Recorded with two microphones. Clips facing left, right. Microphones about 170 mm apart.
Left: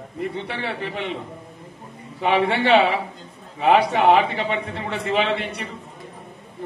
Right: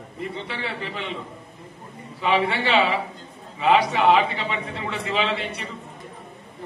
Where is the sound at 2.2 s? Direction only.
55° left (ahead or behind).